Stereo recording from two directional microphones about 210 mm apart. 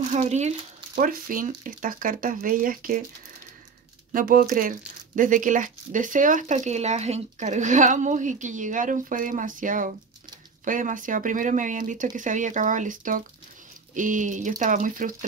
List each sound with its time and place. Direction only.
0.1 s speech: 35° right (ahead or behind)
4.1 s speech: 40° right (ahead or behind)